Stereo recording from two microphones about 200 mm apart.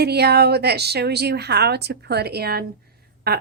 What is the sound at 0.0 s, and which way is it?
Speech, 55° right (ahead or behind).